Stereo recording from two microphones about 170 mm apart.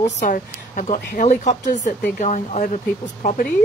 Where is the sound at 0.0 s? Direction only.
45° left (ahead or behind).